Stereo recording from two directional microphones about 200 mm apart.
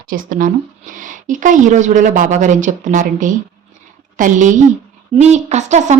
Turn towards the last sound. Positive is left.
turn(degrees=-35)  # may be behind; listen again after turning